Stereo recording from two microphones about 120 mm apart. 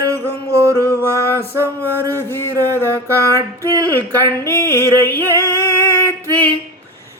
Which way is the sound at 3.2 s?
25° right (ahead or behind).